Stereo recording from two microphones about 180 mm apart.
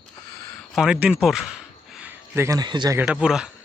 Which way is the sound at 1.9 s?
10° right (ahead or behind).